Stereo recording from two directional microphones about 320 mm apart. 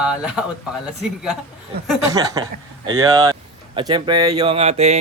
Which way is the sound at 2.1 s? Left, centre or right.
Centre.